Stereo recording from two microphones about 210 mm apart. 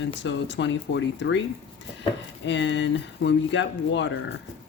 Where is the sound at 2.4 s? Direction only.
55° left (ahead or behind).